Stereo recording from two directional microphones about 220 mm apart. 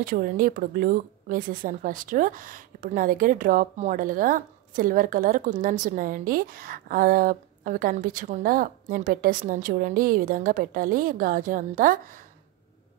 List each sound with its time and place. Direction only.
0.0 s speech: 40° right (ahead or behind)